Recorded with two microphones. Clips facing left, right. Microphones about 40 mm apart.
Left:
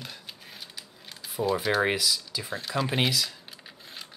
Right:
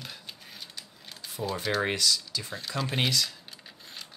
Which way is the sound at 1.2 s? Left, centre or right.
Centre.